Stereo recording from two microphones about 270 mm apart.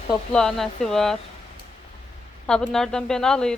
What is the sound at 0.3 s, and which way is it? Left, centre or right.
Speech, centre.